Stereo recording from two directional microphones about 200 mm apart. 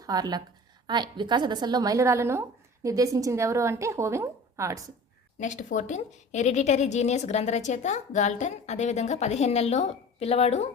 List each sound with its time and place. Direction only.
0.0 s a woman's voice: 20° right (ahead or behind)
5.4 s a woman's voice: 40° left (ahead or behind)